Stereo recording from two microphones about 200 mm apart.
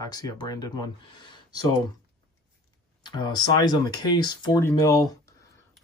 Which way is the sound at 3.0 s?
20° left (ahead or behind).